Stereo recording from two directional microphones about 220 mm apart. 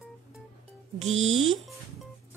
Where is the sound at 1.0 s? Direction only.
30° right (ahead or behind).